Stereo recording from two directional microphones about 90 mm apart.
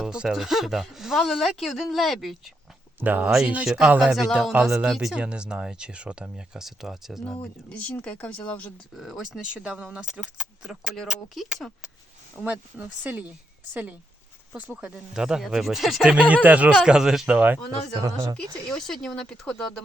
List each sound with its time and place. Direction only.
0.0 s speech: 10° right (ahead or behind)
3.0 s speech: 20° right (ahead or behind)
4.1 s speech: 5° right (ahead or behind)
7.7 s speech: 15° left (ahead or behind)
9.0 s speech: centre (ahead or behind)
9.6 s speech: 15° right (ahead or behind)
14.8 s speech: 10° right (ahead or behind)
18.0 s speech: 40° right (ahead or behind)
18.7 s speech: 5° left (ahead or behind)